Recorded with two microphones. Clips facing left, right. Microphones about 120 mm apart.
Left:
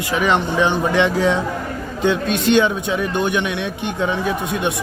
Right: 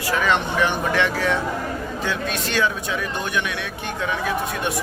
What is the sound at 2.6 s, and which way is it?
A man's voice, 25° left (ahead or behind).